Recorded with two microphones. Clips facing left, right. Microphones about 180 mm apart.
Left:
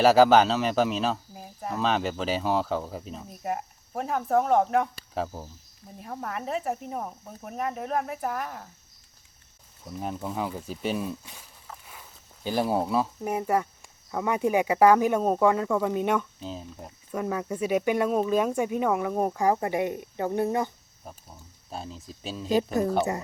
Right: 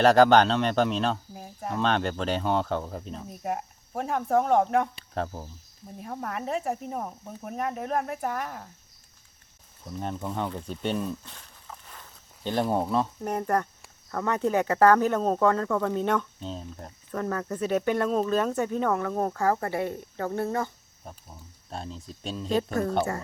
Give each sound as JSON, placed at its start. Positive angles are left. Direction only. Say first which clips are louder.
{"t": 0.0, "sound": "speech", "louder": "even", "side_deg": 5}
{"t": 9.8, "sound": "speech", "louder": "even", "side_deg": 5}
{"t": 21.0, "sound": "speech", "louder": "even", "side_deg": 0}